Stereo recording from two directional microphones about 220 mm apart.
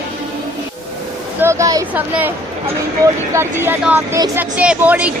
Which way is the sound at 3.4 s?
10° right (ahead or behind).